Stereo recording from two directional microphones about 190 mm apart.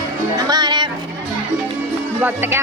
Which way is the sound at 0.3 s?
20° right (ahead or behind).